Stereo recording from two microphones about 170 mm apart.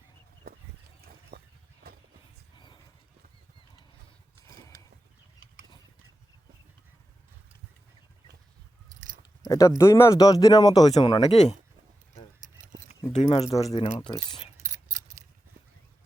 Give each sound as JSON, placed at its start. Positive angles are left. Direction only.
{"t": 0.4, "sound": "a sound", "side_deg": -60}
{"t": 1.8, "sound": "horse", "side_deg": -65}
{"t": 4.4, "sound": "horse", "side_deg": 20}
{"t": 9.5, "sound": "speech", "side_deg": 20}
{"t": 11.2, "sound": "speech", "side_deg": 40}
{"t": 13.1, "sound": "speech", "side_deg": 40}
{"t": 13.5, "sound": "speech", "side_deg": 20}
{"t": 14.6, "sound": "keys jangling", "side_deg": -45}